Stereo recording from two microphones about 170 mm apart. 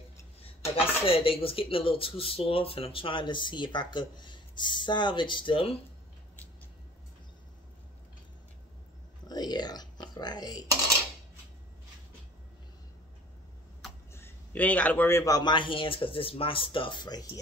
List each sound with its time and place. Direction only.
0.4 s speech: 35° left (ahead or behind)
9.3 s whispering: 25° left (ahead or behind)
14.1 s a man's voice: 10° left (ahead or behind)